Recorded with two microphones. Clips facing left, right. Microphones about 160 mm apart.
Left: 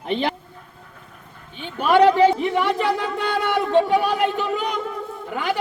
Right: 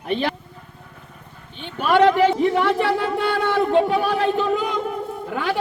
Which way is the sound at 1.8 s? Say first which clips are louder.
Left 1 dB; 15° left (ahead or behind).